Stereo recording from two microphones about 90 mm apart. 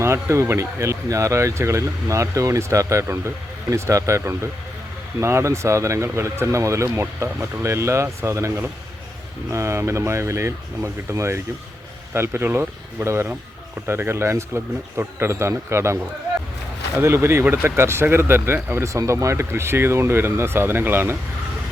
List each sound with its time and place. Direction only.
0.0 s speech: 30° right (ahead or behind)
17.0 s speech: 30° right (ahead or behind)